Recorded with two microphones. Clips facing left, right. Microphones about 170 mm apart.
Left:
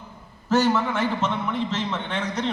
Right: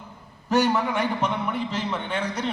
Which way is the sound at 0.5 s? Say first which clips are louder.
Left 1 dB; 15° right (ahead or behind).